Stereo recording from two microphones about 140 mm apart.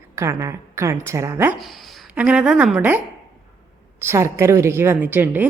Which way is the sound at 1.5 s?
Centre (ahead or behind).